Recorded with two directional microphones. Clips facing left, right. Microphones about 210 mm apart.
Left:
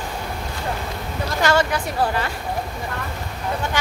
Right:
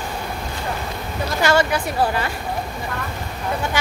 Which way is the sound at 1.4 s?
10° right (ahead or behind).